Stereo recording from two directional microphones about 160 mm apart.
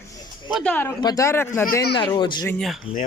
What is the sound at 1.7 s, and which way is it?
Speech, 85° left.